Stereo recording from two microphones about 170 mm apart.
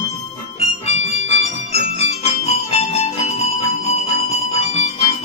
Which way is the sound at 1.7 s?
40° left (ahead or behind).